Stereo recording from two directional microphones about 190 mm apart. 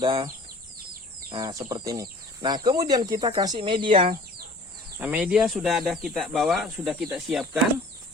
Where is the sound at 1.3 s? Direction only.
20° right (ahead or behind).